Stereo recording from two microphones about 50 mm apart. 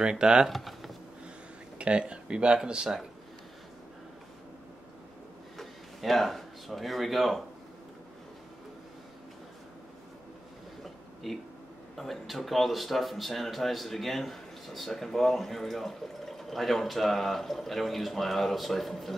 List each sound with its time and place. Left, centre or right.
0.0 s speech: centre
0.5 s speech: centre
1.8 s speech: right
5.6 s speech: centre
11.2 s speech: centre